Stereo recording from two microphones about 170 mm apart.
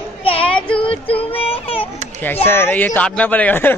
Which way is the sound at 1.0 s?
35° left (ahead or behind).